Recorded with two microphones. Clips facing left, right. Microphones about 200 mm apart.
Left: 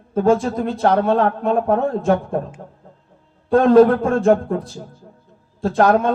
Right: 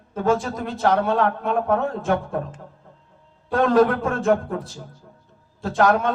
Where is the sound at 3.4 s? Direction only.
30° left (ahead or behind).